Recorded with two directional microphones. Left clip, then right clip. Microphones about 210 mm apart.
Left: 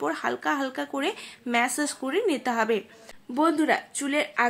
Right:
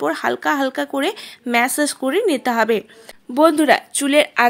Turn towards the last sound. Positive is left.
turn(degrees=-45)  # may be behind; listen again after turning